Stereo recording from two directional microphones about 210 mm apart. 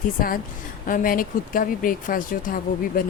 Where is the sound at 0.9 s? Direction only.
40° left (ahead or behind).